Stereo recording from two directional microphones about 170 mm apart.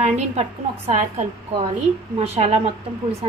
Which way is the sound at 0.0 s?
40° right (ahead or behind).